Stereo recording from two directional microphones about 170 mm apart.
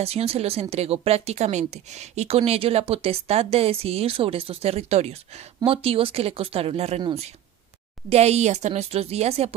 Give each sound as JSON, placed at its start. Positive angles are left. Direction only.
{"t": 0.0, "sound": "speech", "side_deg": -35}